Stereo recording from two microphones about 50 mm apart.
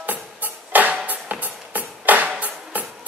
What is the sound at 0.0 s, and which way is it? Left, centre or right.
Music, right.